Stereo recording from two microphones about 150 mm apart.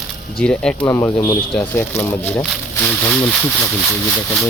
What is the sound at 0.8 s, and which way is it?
Speech, 20° left (ahead or behind).